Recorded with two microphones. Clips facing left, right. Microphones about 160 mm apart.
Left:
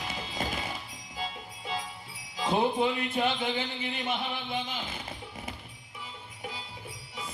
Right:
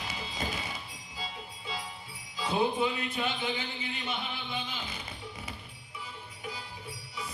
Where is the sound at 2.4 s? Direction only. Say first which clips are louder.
Left 2 dB; 55° left (ahead or behind).